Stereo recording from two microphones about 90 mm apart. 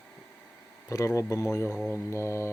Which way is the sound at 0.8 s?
35° left (ahead or behind).